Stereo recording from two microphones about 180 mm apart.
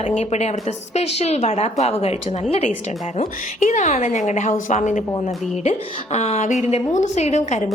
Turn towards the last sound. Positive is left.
turn(degrees=40)  # may be behind; listen again after turning